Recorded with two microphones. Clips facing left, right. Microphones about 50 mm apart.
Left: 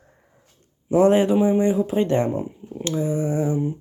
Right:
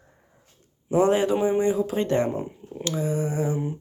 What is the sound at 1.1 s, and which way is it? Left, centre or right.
Speech, left.